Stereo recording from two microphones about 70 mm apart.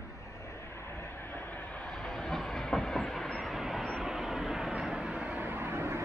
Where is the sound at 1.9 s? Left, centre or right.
Centre; by 6.0 s right.